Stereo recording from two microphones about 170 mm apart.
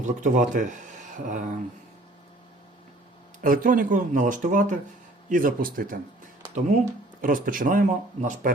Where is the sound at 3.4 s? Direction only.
55° right (ahead or behind).